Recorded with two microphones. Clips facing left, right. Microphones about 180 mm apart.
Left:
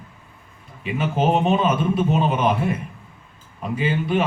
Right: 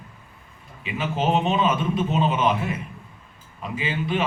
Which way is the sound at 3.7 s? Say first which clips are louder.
Left 4 dB; 50° left (ahead or behind).